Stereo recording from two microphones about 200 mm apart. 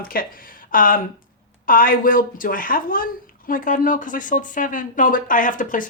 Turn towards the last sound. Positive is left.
turn(degrees=40)  # may be behind; listen again after turning